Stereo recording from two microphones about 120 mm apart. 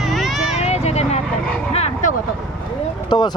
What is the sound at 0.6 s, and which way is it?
Vehicle, 65° left (ahead or behind).